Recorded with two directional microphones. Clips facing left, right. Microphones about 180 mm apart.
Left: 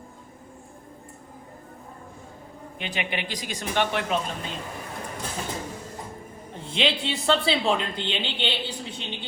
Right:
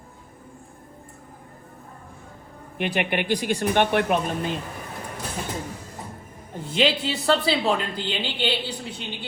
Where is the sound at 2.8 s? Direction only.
55° right (ahead or behind).